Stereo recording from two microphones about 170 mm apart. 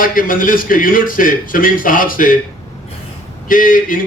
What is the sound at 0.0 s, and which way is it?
A man's voice, 55° left (ahead or behind).